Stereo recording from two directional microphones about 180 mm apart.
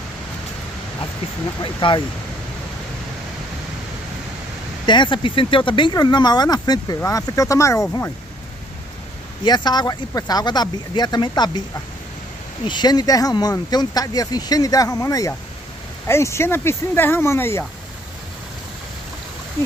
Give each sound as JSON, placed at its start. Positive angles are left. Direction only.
{"t": 1.6, "sound": "speech", "side_deg": 25}
{"t": 4.8, "sound": "speech", "side_deg": 25}
{"t": 9.4, "sound": "speech", "side_deg": 25}